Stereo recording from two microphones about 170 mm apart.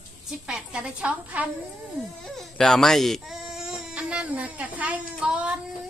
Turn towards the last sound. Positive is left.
turn(degrees=-5)  # may be behind; listen again after turning